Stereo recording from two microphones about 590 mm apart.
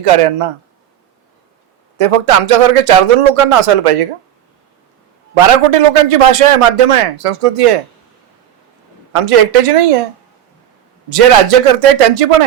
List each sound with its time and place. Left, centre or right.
0.0 s a man's voice: right
2.0 s a man's voice: right
5.3 s a man's voice: right
9.1 s a man's voice: right
11.1 s a man's voice: right